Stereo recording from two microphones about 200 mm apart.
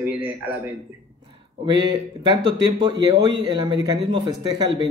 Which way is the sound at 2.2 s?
20° right (ahead or behind).